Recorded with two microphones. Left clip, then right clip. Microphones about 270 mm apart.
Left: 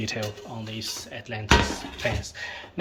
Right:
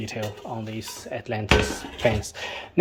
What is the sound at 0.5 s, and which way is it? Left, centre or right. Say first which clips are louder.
Speech: even; centre.